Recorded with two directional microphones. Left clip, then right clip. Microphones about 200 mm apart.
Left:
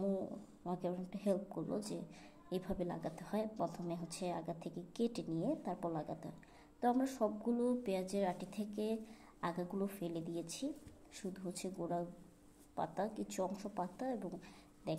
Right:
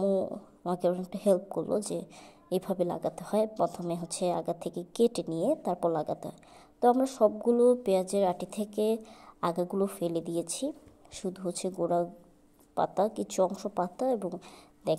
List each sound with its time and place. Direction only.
0.0 s a woman's voice: 35° right (ahead or behind)